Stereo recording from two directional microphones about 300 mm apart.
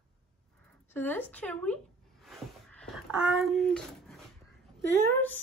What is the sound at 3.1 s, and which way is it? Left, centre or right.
A woman's voice, centre.